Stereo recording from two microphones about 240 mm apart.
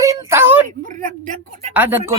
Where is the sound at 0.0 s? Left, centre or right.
Centre.